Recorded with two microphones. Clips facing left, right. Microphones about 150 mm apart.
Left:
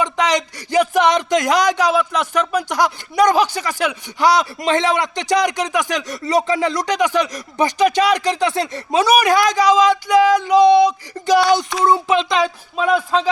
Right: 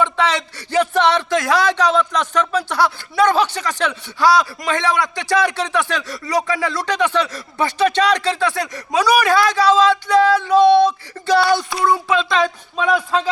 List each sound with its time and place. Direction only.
0.0 s speech: 15° left (ahead or behind)
12.7 s a man's voice: 5° left (ahead or behind)